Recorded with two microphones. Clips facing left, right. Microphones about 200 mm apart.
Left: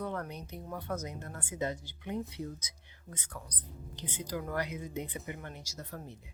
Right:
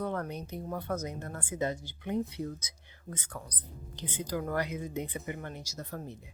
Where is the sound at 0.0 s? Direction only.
50° right (ahead or behind).